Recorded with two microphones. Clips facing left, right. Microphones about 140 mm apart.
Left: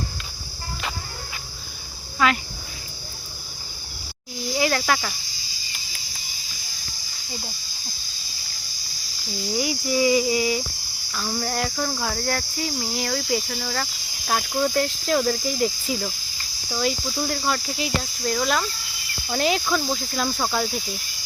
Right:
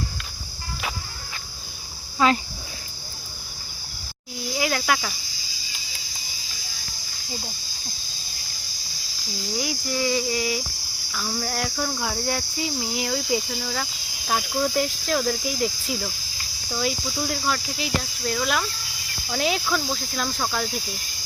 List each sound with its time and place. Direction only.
2.1 s speech: 30° right (ahead or behind)
4.5 s cricket: centre (ahead or behind)
9.6 s speech: 5° left (ahead or behind)
12.5 s cricket: 10° right (ahead or behind)
14.3 s speech: centre (ahead or behind)